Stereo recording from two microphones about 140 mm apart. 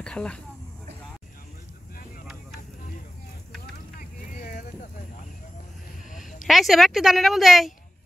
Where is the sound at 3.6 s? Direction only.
75° left (ahead or behind).